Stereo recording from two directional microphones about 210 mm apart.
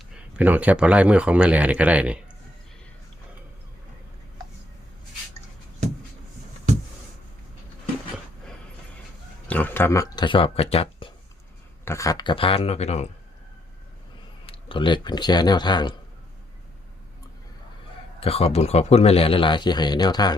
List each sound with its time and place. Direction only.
0.3 s speech: 10° right (ahead or behind)
9.5 s speech: 10° left (ahead or behind); by 11.1 s 25° left (ahead or behind)
11.9 s speech: 15° left (ahead or behind)
14.4 s speech: 25° left (ahead or behind)
18.2 s speech: 30° left (ahead or behind)